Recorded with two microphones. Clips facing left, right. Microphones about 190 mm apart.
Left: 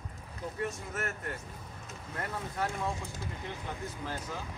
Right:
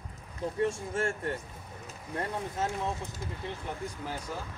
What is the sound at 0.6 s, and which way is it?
Speech, 30° right (ahead or behind).